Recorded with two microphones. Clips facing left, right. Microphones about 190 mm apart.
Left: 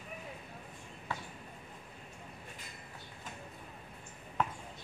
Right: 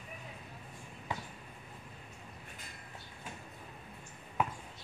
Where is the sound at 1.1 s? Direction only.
15° right (ahead or behind).